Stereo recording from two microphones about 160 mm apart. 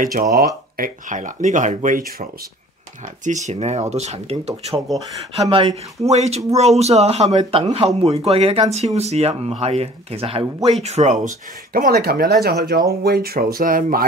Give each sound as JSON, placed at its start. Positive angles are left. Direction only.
{"t": 0.0, "sound": "speech", "side_deg": -60}
{"t": 3.3, "sound": "speech", "side_deg": -50}
{"t": 11.7, "sound": "speech", "side_deg": -70}